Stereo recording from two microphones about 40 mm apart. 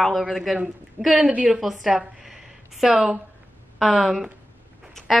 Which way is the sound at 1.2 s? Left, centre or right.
Right.